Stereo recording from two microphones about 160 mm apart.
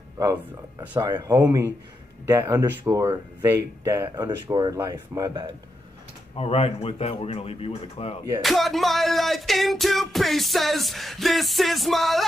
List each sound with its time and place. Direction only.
0.2 s speech: 20° right (ahead or behind)
6.3 s speech: 40° left (ahead or behind)
8.4 s music: centre (ahead or behind)